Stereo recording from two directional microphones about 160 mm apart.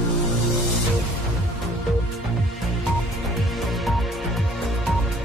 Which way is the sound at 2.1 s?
Centre (ahead or behind).